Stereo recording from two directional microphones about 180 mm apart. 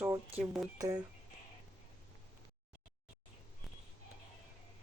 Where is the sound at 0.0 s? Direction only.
10° right (ahead or behind).